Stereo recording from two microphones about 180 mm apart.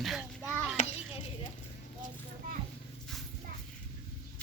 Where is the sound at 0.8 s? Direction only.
35° left (ahead or behind).